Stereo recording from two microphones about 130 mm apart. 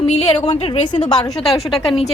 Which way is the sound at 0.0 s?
50° left (ahead or behind).